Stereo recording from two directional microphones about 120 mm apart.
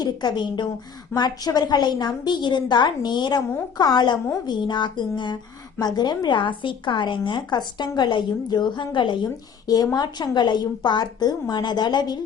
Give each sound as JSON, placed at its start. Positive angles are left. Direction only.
{"t": 0.0, "sound": "a woman's voice", "side_deg": 35}